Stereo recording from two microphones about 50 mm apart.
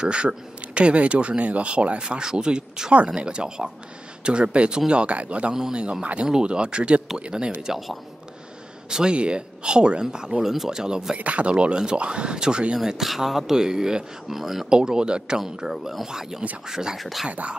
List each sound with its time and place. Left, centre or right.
0.0 s speech: centre
5.5 s speech: centre
9.1 s speech: right
10.4 s speech: centre
11.1 s speech: right; by 14.8 s centre
14.8 s speech: centre
17.3 s speech: right